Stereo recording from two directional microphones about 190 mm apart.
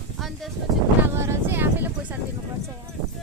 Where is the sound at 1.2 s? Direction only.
15° right (ahead or behind).